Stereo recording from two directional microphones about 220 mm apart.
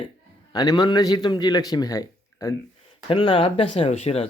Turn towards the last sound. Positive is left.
turn(degrees=30)  # may be behind; listen again after turning